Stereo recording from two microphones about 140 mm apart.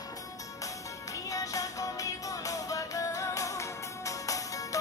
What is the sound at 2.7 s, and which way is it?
Music, 25° left (ahead or behind).